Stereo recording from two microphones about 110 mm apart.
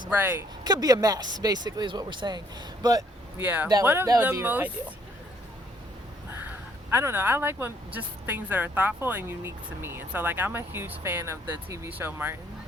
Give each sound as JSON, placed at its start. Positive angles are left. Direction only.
{"t": 0.1, "sound": "speech", "side_deg": -20}
{"t": 0.6, "sound": "speech", "side_deg": -35}
{"t": 3.3, "sound": "speech", "side_deg": -15}
{"t": 3.8, "sound": "speech", "side_deg": -25}
{"t": 6.9, "sound": "speech", "side_deg": -20}